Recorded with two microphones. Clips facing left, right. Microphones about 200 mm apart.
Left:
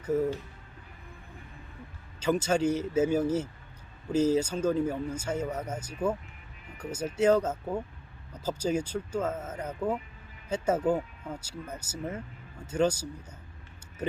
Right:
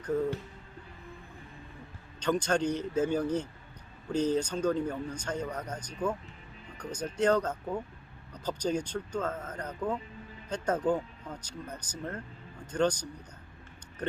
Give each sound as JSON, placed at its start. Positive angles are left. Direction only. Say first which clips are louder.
{"t": 0.0, "sound": "speech", "louder": "left 2 dB", "side_deg": 5}
{"t": 2.2, "sound": "speech", "louder": "left 2 dB", "side_deg": 5}